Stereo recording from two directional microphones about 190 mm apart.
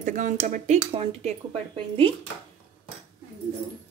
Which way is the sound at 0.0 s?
40° right (ahead or behind).